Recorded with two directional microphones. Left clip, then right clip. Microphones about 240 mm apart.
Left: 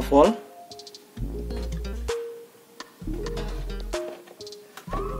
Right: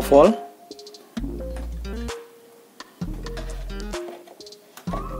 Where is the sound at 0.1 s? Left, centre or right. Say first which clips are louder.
Right 4 dB; right.